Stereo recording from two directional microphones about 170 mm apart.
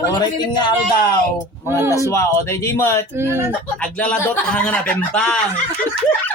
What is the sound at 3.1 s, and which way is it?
Speech, 15° right (ahead or behind).